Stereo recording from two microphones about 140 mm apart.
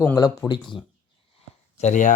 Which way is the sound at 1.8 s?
60° left (ahead or behind).